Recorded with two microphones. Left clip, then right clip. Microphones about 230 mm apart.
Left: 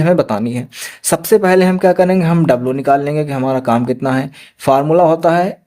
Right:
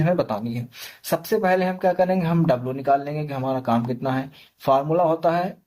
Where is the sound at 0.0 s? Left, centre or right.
Left.